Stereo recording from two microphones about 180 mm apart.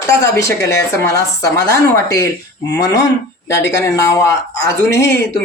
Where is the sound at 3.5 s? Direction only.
20° left (ahead or behind).